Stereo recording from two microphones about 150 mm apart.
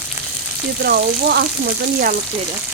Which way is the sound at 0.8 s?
90° right.